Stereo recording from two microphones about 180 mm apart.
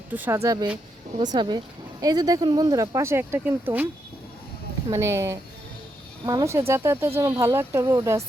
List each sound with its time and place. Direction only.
0.1 s speech: 10° right (ahead or behind)
4.9 s speech: 15° right (ahead or behind)